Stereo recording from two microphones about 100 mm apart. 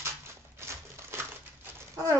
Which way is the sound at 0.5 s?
25° right (ahead or behind).